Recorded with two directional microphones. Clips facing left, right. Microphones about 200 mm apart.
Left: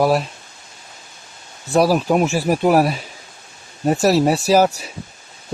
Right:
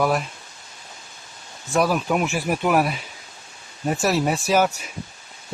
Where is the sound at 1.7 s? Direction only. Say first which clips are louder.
Left 5 dB; 35° left (ahead or behind).